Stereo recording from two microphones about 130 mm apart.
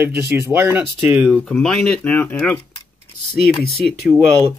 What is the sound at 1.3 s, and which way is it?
Speech, 10° left (ahead or behind).